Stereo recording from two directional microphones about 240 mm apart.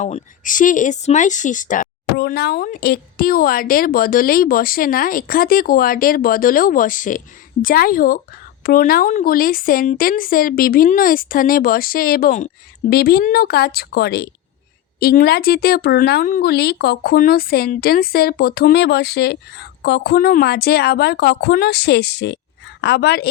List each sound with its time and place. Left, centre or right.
0.0 s speech: left